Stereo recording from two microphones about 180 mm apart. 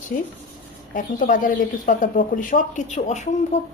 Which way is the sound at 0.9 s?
50° left (ahead or behind).